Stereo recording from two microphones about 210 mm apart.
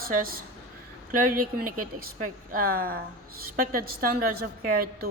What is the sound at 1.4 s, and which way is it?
A woman's voice, 40° right (ahead or behind).